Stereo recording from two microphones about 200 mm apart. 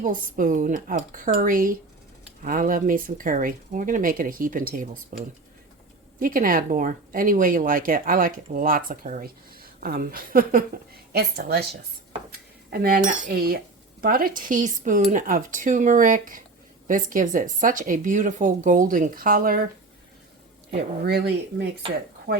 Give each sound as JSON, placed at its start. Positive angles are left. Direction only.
{"t": 0.0, "sound": "speech", "side_deg": -45}
{"t": 12.7, "sound": "speech", "side_deg": -50}
{"t": 20.7, "sound": "speech", "side_deg": -55}